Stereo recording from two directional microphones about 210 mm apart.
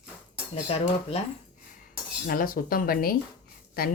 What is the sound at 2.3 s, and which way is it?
Speech, 45° left (ahead or behind).